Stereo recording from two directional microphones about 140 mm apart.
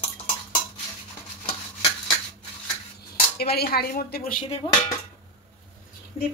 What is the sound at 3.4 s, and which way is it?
Speech, 90° left.